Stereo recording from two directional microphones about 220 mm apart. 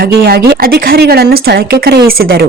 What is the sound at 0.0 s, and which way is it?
A woman's voice, 45° right (ahead or behind).